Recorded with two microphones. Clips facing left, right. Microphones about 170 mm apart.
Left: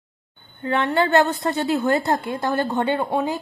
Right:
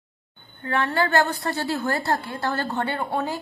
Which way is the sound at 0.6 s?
20° left (ahead or behind).